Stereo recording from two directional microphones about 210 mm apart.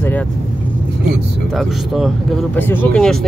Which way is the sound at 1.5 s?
Centre (ahead or behind).